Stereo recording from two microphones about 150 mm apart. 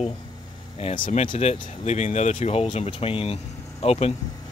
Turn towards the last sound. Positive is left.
turn(degrees=45)  # may be behind; listen again after turning